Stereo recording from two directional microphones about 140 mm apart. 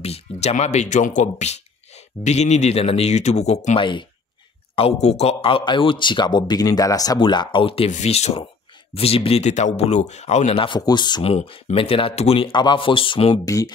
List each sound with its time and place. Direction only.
0.0 s a man's voice: 50° left (ahead or behind)
7.9 s speech: 55° left (ahead or behind)
10.6 s a man's voice: 30° left (ahead or behind)
11.2 s a man's voice: 40° left (ahead or behind)
13.5 s speech: 25° left (ahead or behind)